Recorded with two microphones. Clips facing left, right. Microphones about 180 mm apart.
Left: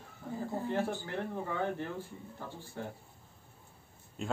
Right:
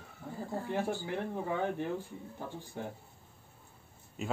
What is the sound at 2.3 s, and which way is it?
Speech, 15° right (ahead or behind).